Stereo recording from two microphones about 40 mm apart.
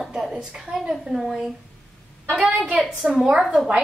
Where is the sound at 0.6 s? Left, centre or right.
Centre.